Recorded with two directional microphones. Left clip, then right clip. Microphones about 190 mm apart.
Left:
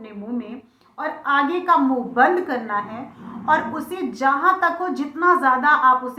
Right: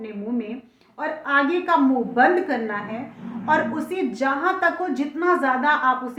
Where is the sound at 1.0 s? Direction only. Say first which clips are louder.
Left 1 dB; 35° right (ahead or behind).